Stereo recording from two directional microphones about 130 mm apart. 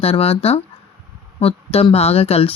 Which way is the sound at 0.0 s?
50° left (ahead or behind).